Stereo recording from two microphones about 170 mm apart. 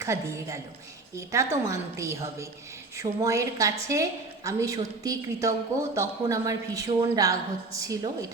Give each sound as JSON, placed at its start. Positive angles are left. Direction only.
{"t": 0.0, "sound": "a woman's voice", "side_deg": -15}